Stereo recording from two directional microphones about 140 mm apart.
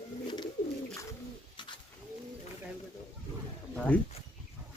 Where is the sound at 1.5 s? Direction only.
35° left (ahead or behind).